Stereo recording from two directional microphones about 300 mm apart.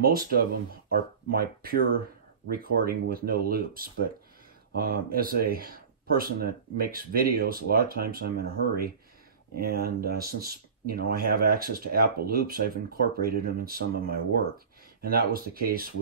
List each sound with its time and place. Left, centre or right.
0.0 s speech: right